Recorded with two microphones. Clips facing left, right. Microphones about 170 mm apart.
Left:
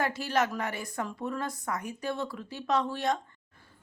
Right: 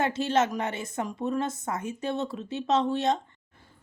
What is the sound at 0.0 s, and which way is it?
Speech, 25° right (ahead or behind).